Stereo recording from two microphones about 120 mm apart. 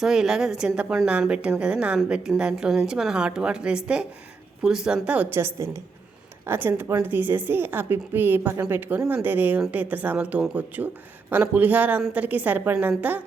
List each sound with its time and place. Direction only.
0.0 s a woman's voice: 5° right (ahead or behind)